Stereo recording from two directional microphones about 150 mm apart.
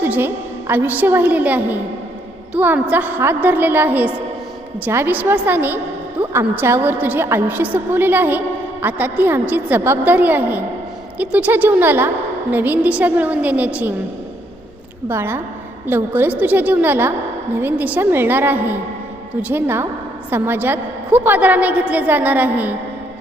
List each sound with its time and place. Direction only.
0.0 s a woman's voice: 15° right (ahead or behind)
15.1 s a woman's voice: 15° right (ahead or behind)